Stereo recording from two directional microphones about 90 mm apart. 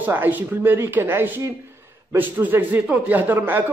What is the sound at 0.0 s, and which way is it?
Speech, 20° right (ahead or behind).